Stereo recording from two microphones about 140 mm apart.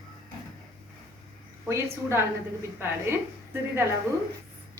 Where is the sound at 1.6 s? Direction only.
20° right (ahead or behind).